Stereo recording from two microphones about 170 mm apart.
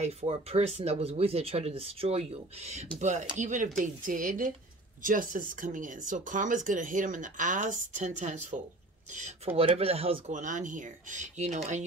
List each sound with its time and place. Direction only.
0.0 s speech: 35° right (ahead or behind)